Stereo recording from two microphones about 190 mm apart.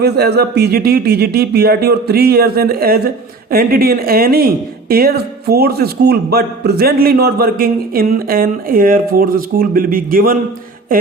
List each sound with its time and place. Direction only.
0.0 s speech: 55° right (ahead or behind)